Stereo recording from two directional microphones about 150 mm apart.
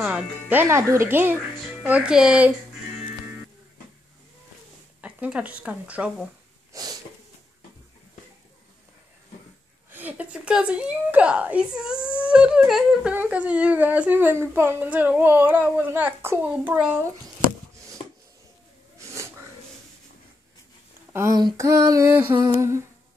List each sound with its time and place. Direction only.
0.0 s humming: 10° right (ahead or behind)
5.0 s humming: 10° right (ahead or behind)
6.7 s a sound: 25° right (ahead or behind)
9.8 s humming: 10° right (ahead or behind)
21.1 s speech: 15° right (ahead or behind)
21.4 s female singing: 25° right (ahead or behind)
22.5 s humming: 20° right (ahead or behind)